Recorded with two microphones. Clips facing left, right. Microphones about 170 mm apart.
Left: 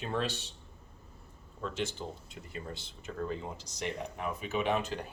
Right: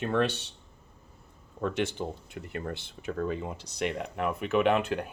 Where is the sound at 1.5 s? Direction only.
60° right (ahead or behind).